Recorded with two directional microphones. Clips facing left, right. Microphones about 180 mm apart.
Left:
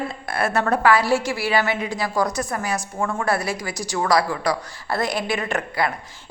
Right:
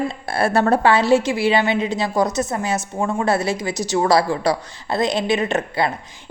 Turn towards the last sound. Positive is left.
turn(degrees=-25)  # may be behind; listen again after turning